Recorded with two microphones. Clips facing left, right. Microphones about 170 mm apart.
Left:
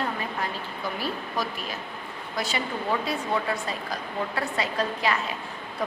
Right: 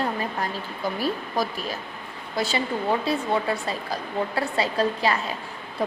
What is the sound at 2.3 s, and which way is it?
Speech, 30° right (ahead or behind).